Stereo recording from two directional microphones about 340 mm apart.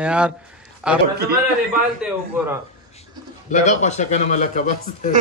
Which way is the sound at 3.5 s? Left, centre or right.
Centre.